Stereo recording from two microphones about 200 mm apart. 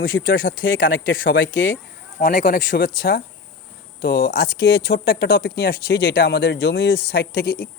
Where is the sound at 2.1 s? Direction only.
40° left (ahead or behind).